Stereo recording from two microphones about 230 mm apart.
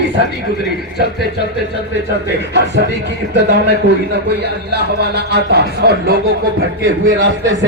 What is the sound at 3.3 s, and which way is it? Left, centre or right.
Music, right.